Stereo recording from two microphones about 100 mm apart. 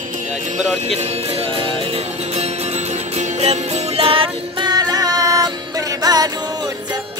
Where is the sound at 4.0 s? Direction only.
65° right (ahead or behind).